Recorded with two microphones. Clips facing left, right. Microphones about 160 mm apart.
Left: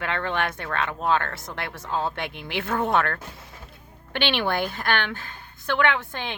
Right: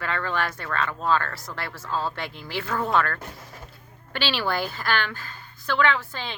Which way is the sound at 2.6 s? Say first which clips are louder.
Left 2 dB; 20° left (ahead or behind).